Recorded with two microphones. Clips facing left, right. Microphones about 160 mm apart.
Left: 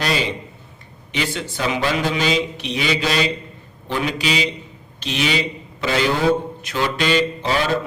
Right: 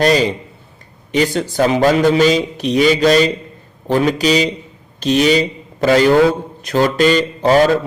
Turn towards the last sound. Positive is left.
turn(degrees=-45)  # may be behind; listen again after turning